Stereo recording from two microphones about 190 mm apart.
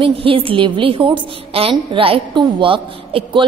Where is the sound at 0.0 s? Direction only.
30° right (ahead or behind).